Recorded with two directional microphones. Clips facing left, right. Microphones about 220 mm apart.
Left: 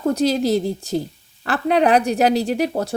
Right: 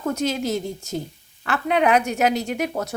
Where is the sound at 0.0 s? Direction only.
35° left (ahead or behind).